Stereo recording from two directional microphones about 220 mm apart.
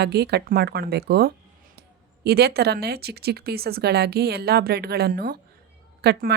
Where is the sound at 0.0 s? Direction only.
50° right (ahead or behind).